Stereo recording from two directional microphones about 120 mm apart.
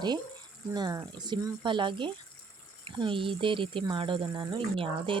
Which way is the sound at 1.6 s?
45° right (ahead or behind).